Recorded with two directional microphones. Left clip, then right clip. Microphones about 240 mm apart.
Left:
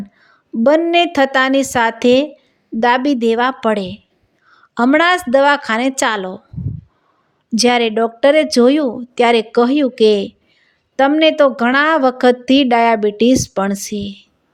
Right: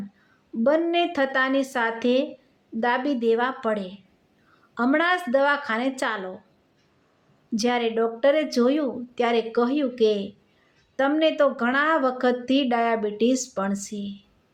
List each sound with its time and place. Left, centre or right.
0.6 s a woman's voice: left
7.5 s a woman's voice: left